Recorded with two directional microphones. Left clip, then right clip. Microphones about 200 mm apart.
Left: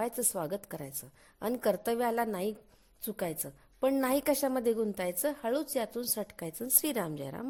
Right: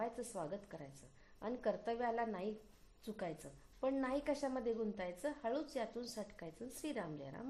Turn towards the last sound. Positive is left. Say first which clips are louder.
# left 10 dB
turn(degrees=50)  # may be behind; listen again after turning